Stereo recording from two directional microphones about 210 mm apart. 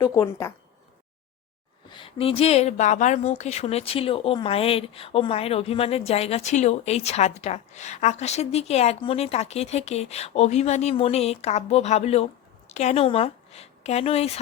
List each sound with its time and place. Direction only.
0.0 s speech: 15° left (ahead or behind)
1.9 s a woman's voice: 25° left (ahead or behind)